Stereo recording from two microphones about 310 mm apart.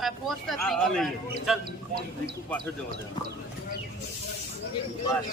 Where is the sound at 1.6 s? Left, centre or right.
Right.